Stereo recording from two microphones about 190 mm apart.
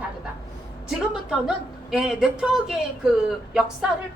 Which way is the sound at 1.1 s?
5° right (ahead or behind).